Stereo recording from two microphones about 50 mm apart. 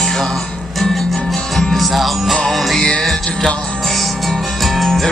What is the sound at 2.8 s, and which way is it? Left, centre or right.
Music, centre.